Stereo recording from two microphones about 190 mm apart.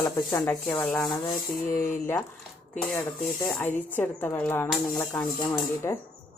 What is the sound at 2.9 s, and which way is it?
A woman's voice, 5° left (ahead or behind).